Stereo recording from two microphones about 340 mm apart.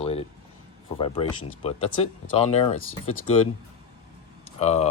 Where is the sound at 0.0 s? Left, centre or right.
Centre.